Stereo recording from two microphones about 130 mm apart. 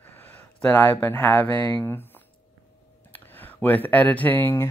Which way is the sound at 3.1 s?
15° left (ahead or behind).